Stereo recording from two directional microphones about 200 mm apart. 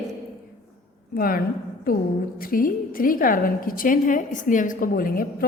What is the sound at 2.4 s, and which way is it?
A woman's voice, 45° left (ahead or behind).